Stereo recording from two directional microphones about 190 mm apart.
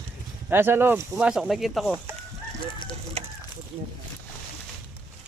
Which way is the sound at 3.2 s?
30° right (ahead or behind).